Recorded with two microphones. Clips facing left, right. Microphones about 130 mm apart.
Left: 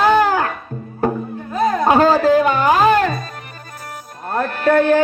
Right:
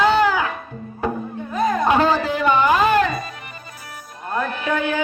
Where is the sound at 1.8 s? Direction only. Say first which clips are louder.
Left 6 dB; 40° left (ahead or behind).